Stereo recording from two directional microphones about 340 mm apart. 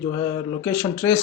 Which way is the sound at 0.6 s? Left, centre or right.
Centre.